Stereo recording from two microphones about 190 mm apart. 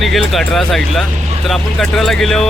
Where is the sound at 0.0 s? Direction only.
Centre (ahead or behind).